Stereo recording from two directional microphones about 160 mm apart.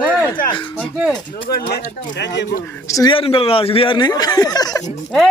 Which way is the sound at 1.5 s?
75° left (ahead or behind).